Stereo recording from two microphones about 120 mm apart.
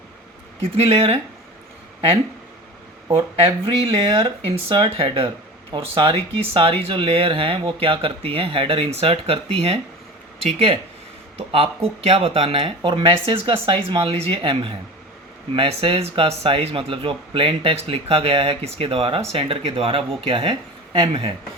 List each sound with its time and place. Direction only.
0.6 s speech: 55° right (ahead or behind)
3.7 s speech: 50° right (ahead or behind)